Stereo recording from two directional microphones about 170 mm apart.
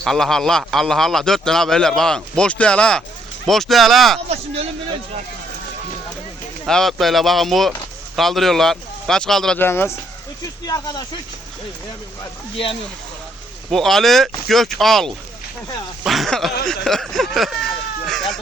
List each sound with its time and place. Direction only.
0.0 s a man's voice: centre (ahead or behind)
6.7 s a man's voice: centre (ahead or behind)
9.6 s speech: 15° left (ahead or behind)
13.7 s a man's voice: centre (ahead or behind)